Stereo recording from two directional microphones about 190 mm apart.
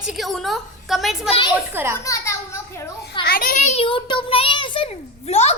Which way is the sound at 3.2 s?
50° left (ahead or behind).